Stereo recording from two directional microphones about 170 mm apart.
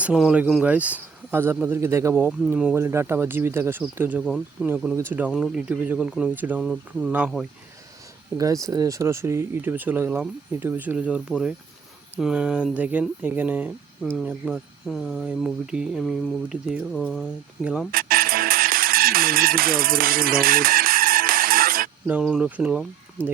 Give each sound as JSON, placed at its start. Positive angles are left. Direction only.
{"t": 0.0, "sound": "speech", "side_deg": -5}
{"t": 8.4, "sound": "speech", "side_deg": -20}
{"t": 17.9, "sound": "music", "side_deg": -60}
{"t": 22.0, "sound": "speech", "side_deg": -5}